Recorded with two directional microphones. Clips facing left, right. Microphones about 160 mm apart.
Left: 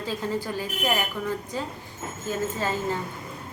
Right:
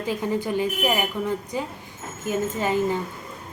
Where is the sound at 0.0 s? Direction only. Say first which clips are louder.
Right 3 dB; 15° right (ahead or behind).